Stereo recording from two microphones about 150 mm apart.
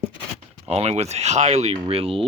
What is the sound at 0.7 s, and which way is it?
Speech, 45° right (ahead or behind).